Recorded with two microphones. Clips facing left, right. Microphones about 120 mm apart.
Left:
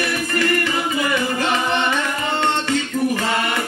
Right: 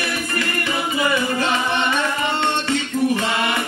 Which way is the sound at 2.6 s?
20° right (ahead or behind).